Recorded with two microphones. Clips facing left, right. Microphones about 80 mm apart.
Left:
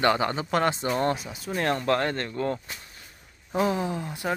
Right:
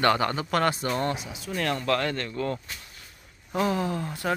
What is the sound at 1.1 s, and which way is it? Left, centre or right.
Speech, left.